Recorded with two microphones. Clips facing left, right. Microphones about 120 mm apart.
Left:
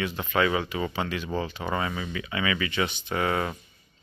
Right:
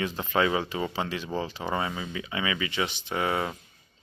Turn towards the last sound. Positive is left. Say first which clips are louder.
# left 1 dB
turn(degrees=-20)  # may be behind; listen again after turning